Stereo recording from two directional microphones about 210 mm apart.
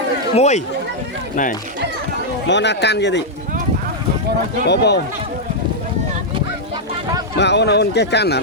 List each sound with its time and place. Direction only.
0.3 s speech: 35° left (ahead or behind)
2.5 s speech: 55° left (ahead or behind)
4.7 s speech: 50° left (ahead or behind)
7.3 s speech: 55° left (ahead or behind)